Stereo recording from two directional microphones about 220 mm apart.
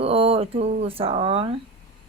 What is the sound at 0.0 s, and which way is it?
Speech, 25° right (ahead or behind).